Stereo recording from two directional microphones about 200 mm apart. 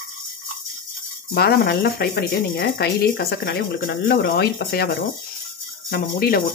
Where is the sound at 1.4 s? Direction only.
50° left (ahead or behind).